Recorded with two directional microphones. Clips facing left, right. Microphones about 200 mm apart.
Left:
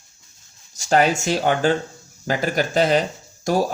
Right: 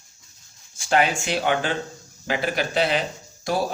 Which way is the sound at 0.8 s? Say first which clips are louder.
Left 3 dB; 40° left (ahead or behind).